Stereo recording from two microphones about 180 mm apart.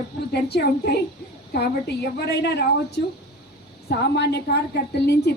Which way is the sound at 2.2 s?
70° left (ahead or behind).